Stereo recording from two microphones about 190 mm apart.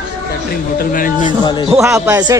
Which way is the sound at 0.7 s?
45° left (ahead or behind).